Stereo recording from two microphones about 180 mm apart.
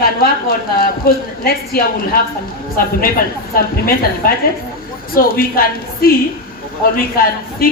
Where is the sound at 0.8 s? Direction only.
55° left (ahead or behind).